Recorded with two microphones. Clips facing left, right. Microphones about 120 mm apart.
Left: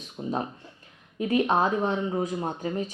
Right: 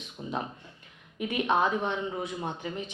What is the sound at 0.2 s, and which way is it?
Speech, 25° left (ahead or behind).